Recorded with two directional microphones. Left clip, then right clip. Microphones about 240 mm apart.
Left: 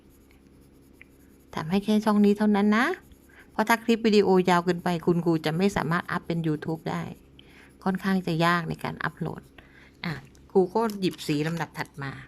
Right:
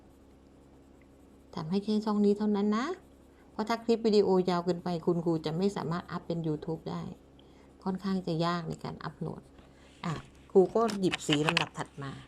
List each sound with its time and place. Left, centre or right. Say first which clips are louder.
1.5 s a woman's voice: left 6 dB; left
9.0 s speech: left 9 dB; left
10.5 s speech: left 1 dB; left